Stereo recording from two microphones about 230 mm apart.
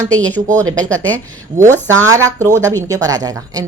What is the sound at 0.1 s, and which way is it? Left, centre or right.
Speech, centre.